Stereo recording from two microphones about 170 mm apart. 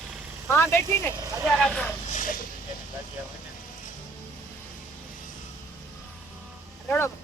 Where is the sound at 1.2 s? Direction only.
20° right (ahead or behind).